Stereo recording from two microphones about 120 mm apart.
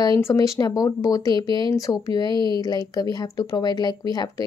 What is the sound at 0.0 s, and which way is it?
Speech, 30° left (ahead or behind).